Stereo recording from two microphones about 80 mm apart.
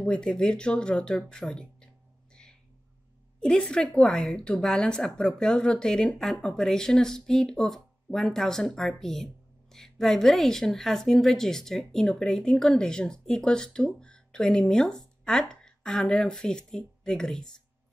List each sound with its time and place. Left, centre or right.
0.0 s a woman's voice: centre
3.3 s a woman's voice: centre